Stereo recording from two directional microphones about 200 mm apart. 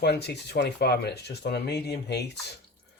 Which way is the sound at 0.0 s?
55° left (ahead or behind).